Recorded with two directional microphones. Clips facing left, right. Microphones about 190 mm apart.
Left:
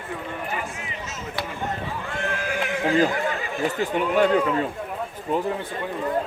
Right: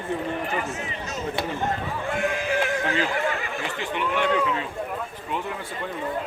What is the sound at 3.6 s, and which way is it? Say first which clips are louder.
Speech: left 8 dB; 40° left (ahead or behind).